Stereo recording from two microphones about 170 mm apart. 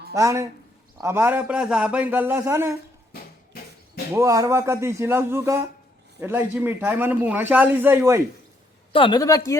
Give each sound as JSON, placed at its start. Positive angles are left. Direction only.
{"t": 0.1, "sound": "a man's voice", "side_deg": -15}
{"t": 3.1, "sound": "a sound", "side_deg": 70}
{"t": 4.1, "sound": "a man's voice", "side_deg": -20}
{"t": 8.9, "sound": "a woman's voice", "side_deg": 30}